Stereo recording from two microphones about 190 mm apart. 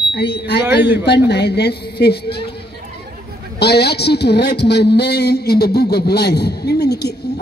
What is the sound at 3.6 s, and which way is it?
A man's voice, 60° left (ahead or behind).